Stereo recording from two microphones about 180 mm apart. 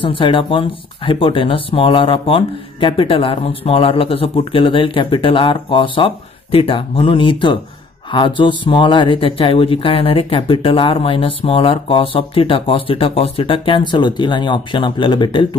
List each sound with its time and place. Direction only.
0.0 s speech: 30° left (ahead or behind)